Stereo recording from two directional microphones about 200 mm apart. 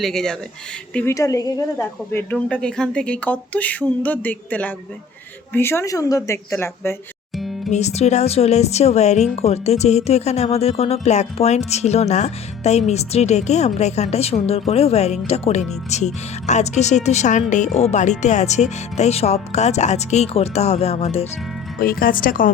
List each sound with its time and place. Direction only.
0.0 s speech: 5° left (ahead or behind)
0.9 s speech: 15° left (ahead or behind)
1.8 s speech: 5° left (ahead or behind)
7.7 s speech: 35° left (ahead or behind)
21.8 s speech: 45° left (ahead or behind)